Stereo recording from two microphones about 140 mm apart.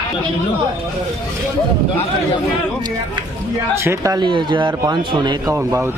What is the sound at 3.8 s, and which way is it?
Speech, 25° right (ahead or behind).